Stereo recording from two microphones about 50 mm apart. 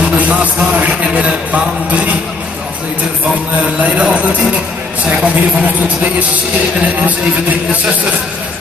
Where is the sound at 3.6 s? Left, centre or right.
Right.